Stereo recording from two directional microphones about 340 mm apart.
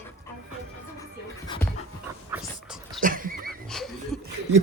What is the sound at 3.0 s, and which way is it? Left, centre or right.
Neigh, right.